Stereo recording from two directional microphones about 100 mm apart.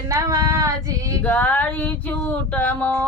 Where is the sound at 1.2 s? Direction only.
15° left (ahead or behind).